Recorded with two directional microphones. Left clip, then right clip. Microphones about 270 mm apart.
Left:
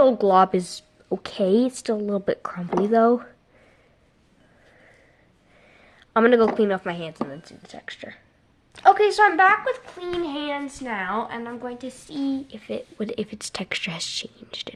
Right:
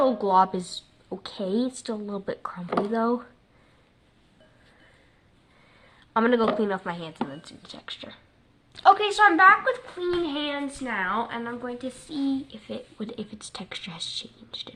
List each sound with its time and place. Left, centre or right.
0.0 s a woman's voice: left
6.1 s a woman's voice: left
9.2 s a woman's voice: left